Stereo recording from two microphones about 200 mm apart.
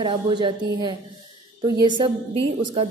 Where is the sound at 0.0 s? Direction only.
25° right (ahead or behind).